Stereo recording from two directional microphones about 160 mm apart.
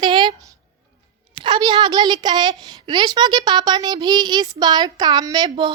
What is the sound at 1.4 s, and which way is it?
A woman's voice, 30° right (ahead or behind).